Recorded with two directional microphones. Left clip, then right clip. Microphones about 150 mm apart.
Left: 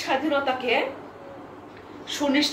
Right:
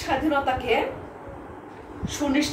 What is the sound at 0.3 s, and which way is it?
Speech, 15° left (ahead or behind).